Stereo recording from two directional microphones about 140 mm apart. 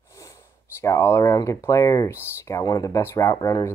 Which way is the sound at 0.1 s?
20° left (ahead or behind).